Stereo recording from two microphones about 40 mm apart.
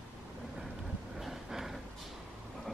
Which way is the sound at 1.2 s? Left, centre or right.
Centre.